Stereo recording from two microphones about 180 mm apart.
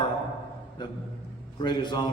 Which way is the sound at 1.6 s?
25° left (ahead or behind).